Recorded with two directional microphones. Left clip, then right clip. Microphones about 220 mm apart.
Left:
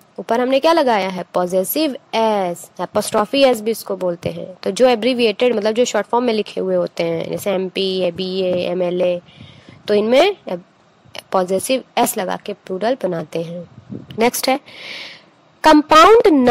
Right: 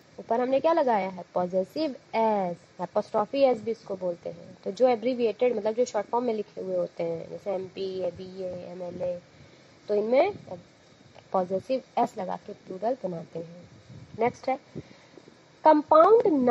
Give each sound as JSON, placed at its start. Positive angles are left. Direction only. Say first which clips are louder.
{"t": 0.3, "sound": "a woman's voice", "louder": "left 9 dB", "side_deg": 35}
{"t": 15.6, "sound": "a woman's voice", "louder": "left 9 dB", "side_deg": 40}